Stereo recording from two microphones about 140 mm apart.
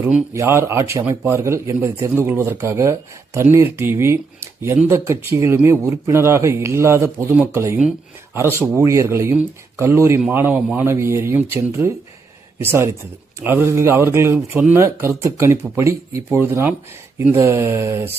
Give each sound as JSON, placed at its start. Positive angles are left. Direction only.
{"t": 0.3, "sound": "speech", "side_deg": -20}
{"t": 10.2, "sound": "speech", "side_deg": -5}